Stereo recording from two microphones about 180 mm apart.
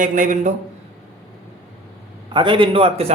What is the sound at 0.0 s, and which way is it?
Speech, 45° right (ahead or behind).